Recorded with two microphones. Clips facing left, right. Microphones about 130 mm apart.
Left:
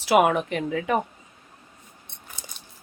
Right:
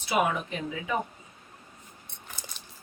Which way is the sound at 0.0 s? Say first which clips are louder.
Left 8 dB; 80° left.